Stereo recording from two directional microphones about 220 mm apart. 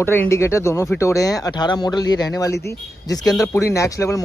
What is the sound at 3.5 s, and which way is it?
Speech, 15° left (ahead or behind).